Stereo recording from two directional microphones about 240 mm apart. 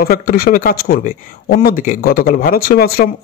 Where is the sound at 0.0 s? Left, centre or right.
Left.